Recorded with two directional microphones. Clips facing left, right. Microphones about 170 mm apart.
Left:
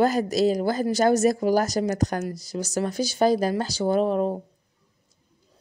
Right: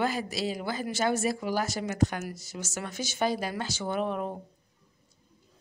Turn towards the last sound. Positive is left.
turn(degrees=35)  # may be behind; listen again after turning